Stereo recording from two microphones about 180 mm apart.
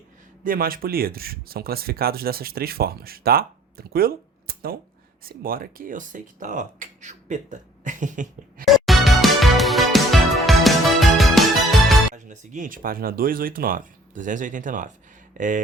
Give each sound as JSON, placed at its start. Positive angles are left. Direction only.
{"t": 0.4, "sound": "speech", "side_deg": -55}
{"t": 8.6, "sound": "music", "side_deg": 0}
{"t": 12.1, "sound": "speech", "side_deg": -45}